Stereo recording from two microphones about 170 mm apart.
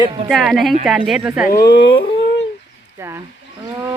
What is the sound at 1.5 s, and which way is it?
Speech, 70° left (ahead or behind).